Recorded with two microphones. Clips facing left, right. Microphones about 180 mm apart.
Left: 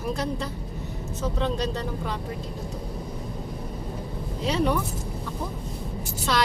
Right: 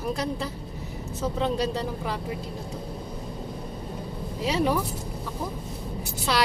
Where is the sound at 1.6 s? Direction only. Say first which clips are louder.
Right 1 dB; 5° right (ahead or behind).